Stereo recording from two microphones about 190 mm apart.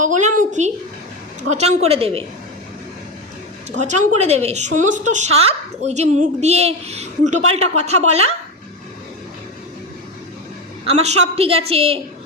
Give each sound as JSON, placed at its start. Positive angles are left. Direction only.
{"t": 0.0, "sound": "a sound", "side_deg": -40}
{"t": 1.4, "sound": "a woman's voice", "side_deg": -35}
{"t": 3.8, "sound": "a woman's voice", "side_deg": -40}
{"t": 10.8, "sound": "a woman's voice", "side_deg": -35}